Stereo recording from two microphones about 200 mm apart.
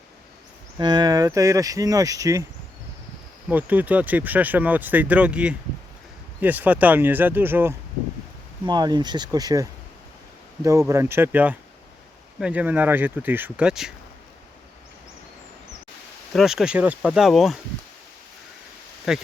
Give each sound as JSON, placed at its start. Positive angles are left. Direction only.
{"t": 0.8, "sound": "speech", "side_deg": -20}
{"t": 3.5, "sound": "speech", "side_deg": -10}
{"t": 8.6, "sound": "speech", "side_deg": -20}
{"t": 16.3, "sound": "speech", "side_deg": 0}
{"t": 19.1, "sound": "speech", "side_deg": 0}